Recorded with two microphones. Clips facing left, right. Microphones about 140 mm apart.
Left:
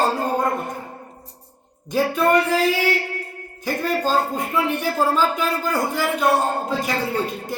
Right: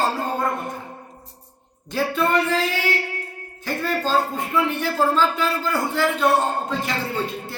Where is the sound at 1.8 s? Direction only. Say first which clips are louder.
Left 3 dB; 15° left (ahead or behind).